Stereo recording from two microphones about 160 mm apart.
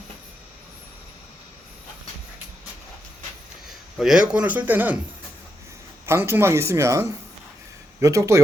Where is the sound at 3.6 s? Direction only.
5° right (ahead or behind).